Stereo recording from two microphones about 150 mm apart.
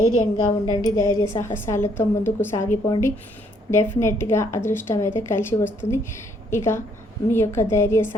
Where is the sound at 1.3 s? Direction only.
20° left (ahead or behind).